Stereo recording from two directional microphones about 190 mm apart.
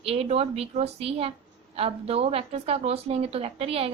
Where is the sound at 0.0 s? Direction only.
30° right (ahead or behind).